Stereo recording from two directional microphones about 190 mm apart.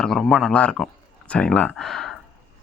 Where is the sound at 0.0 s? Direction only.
Centre (ahead or behind).